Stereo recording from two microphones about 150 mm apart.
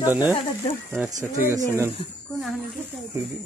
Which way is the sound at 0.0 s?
15° right (ahead or behind).